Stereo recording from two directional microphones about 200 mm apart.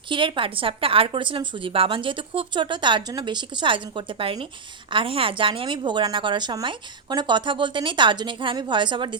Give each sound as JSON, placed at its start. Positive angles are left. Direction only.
{"t": 0.1, "sound": "a woman's voice", "side_deg": -25}